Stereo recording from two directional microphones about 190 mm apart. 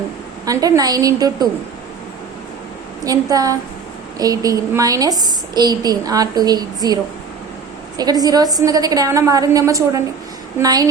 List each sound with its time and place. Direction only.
0.4 s a woman's voice: 20° right (ahead or behind)
3.0 s a woman's voice: 20° right (ahead or behind)